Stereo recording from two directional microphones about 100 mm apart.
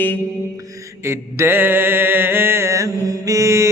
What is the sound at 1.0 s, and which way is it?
Mantra, 25° right (ahead or behind).